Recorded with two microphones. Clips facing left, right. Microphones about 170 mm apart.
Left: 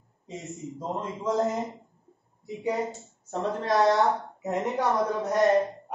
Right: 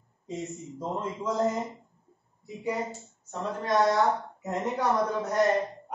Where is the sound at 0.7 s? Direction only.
Centre (ahead or behind).